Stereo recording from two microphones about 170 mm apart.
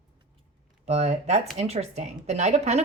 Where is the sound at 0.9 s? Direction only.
40° right (ahead or behind).